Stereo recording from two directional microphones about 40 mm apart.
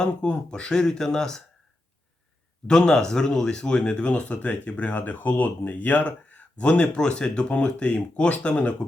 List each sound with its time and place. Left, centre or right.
0.0 s speech: left
2.6 s speech: centre